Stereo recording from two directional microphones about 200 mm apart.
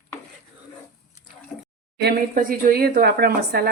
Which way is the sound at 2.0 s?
45° right (ahead or behind).